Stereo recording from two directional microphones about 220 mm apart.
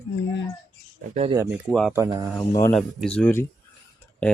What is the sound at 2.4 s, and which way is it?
Speech, 15° left (ahead or behind).